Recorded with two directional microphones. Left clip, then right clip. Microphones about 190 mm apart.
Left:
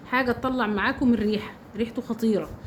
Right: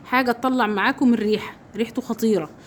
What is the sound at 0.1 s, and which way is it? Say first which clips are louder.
A woman's voice: right 4 dB; 60° right (ahead or behind).